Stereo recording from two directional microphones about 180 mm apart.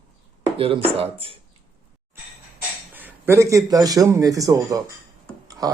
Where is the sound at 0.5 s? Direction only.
30° right (ahead or behind).